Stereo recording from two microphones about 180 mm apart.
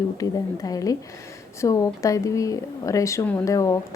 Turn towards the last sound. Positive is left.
turn(degrees=15)  # may be behind; listen again after turning